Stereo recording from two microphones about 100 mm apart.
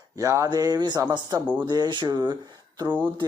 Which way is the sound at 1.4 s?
15° right (ahead or behind).